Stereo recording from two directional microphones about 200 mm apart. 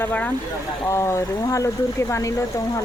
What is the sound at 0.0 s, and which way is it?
Speech, 10° left (ahead or behind).